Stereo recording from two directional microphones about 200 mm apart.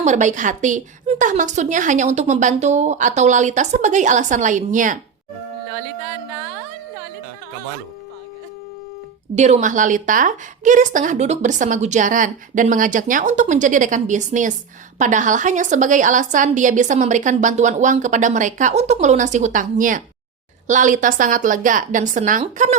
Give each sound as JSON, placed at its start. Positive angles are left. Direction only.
{"t": 0.0, "sound": "a woman's voice", "side_deg": -35}
{"t": 9.3, "sound": "a woman's voice", "side_deg": -35}